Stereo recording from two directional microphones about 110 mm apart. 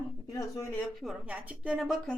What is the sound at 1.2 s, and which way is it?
Speech, 10° right (ahead or behind).